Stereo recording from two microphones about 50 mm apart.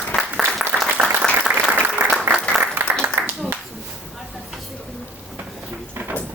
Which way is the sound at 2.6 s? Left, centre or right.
Right.